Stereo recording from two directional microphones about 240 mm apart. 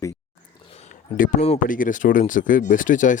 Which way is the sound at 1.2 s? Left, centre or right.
Left.